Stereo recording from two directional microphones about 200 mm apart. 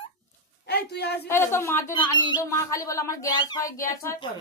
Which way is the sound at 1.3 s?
10° left (ahead or behind).